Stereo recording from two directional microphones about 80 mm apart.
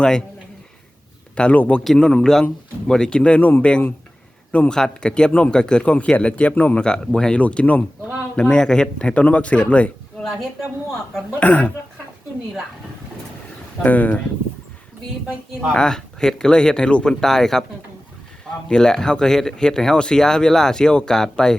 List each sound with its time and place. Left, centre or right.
0.0 s speech: centre
1.4 s speech: centre
1.8 s speech: centre
11.3 s speech: centre
13.8 s speech: centre
15.7 s speech: centre
18.7 s speech: centre